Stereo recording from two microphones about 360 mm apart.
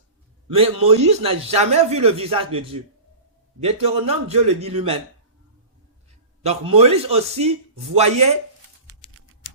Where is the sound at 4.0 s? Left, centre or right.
Centre.